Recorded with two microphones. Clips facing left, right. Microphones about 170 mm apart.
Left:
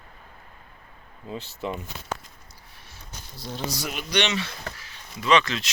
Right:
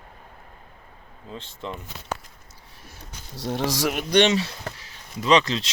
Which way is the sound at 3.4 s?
70° right (ahead or behind).